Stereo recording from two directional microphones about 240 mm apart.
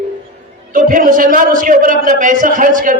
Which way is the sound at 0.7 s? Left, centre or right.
Right.